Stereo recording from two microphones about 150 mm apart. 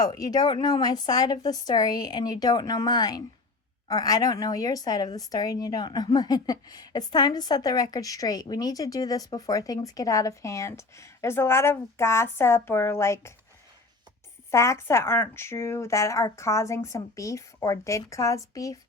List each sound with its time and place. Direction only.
0.0 s a woman's voice: 25° left (ahead or behind)
14.5 s a woman's voice: 20° left (ahead or behind)